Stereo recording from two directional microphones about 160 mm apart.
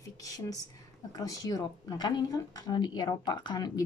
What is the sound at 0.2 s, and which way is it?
A woman's voice, 20° left (ahead or behind).